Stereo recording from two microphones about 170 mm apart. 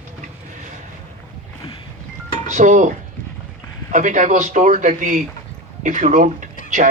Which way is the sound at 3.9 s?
45° right (ahead or behind).